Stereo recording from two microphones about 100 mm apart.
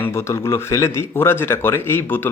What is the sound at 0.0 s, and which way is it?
Speech, 25° left (ahead or behind).